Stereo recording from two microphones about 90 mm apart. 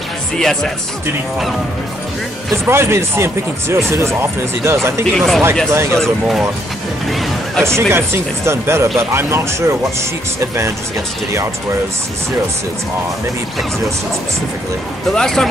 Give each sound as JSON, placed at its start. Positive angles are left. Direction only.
{"t": 0.4, "sound": "speech", "side_deg": 5}
{"t": 2.5, "sound": "speech", "side_deg": -30}
{"t": 5.1, "sound": "speech", "side_deg": 0}
{"t": 5.7, "sound": "speech", "side_deg": -30}
{"t": 5.9, "sound": "speech", "side_deg": 0}
{"t": 7.6, "sound": "speech", "side_deg": -30}
{"t": 15.1, "sound": "speech", "side_deg": 5}